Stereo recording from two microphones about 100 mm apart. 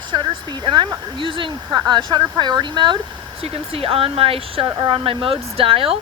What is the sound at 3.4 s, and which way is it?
Speech, 70° right (ahead or behind).